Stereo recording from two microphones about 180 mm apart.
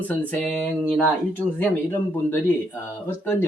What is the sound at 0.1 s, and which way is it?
Speech, 10° left (ahead or behind).